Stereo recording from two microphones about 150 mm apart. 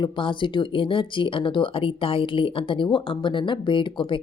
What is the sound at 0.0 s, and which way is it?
A woman's voice, 35° left (ahead or behind).